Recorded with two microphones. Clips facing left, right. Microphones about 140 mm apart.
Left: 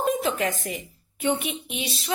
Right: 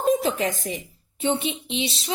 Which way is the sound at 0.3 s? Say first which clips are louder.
Right 1 dB; 30° right (ahead or behind).